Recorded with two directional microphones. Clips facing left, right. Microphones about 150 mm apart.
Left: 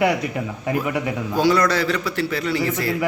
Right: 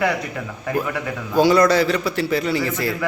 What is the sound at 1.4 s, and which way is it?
Speech, 15° right (ahead or behind).